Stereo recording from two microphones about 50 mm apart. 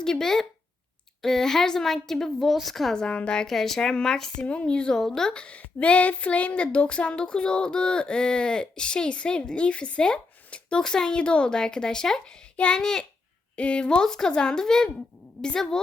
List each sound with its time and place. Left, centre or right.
0.0 s a woman's voice: centre
2.9 s a woman's voice: centre
4.4 s a woman's voice: left
5.5 s a sound: left
12.2 s a child's voice: left
13.6 s a woman's voice: left